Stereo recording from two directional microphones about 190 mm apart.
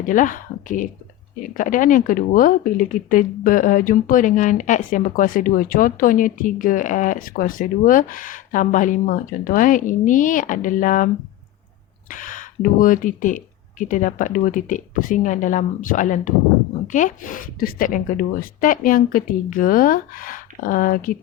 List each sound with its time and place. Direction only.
0.0 s speech: 45° left (ahead or behind)